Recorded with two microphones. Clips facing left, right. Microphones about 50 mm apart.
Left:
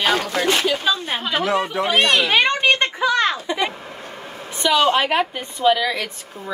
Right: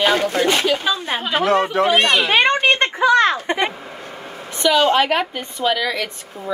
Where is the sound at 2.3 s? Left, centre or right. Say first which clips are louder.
Right 2 dB; right.